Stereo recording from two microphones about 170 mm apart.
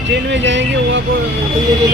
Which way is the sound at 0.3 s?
90° right.